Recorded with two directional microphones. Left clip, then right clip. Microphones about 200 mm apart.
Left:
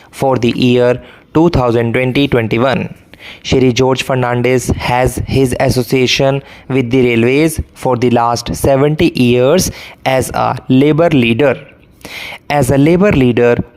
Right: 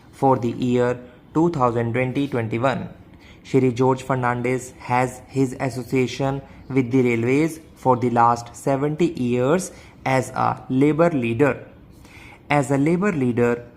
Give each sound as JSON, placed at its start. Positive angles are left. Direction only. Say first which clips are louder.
{"t": 0.2, "sound": "speech", "louder": "left 7 dB", "side_deg": 40}